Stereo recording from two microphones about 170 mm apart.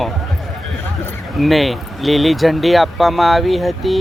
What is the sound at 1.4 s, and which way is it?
Speech, centre (ahead or behind).